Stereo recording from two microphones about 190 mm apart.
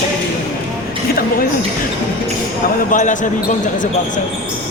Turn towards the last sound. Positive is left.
turn(degrees=40)  # may be behind; listen again after turning